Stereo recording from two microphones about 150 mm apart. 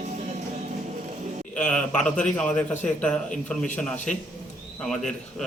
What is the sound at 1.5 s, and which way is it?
A man's voice, 5° left (ahead or behind).